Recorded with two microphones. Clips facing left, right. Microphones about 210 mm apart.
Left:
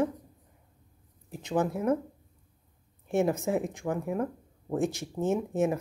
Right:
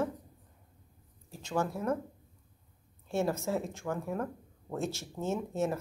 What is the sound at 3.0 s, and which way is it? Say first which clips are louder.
Speech: left 5 dB; 15° left (ahead or behind).